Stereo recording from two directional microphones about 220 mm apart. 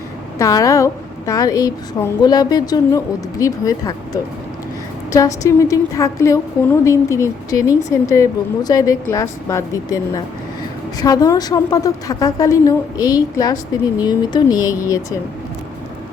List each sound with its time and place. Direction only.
0.3 s a woman's voice: 15° left (ahead or behind)
11.0 s a woman's voice: 15° left (ahead or behind)